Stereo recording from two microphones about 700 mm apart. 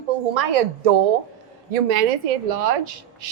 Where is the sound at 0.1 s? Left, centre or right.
Right.